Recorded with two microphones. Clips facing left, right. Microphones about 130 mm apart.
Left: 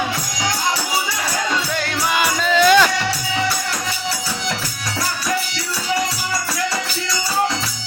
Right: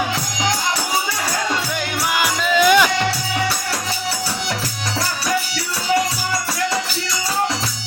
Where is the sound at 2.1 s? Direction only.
15° right (ahead or behind).